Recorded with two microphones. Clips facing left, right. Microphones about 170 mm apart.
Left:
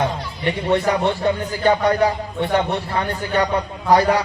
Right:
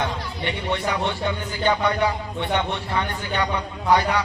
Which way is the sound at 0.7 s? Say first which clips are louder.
Left 7 dB; 40° left (ahead or behind).